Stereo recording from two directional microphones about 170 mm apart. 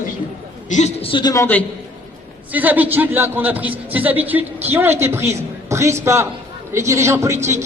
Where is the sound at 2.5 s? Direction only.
10° right (ahead or behind).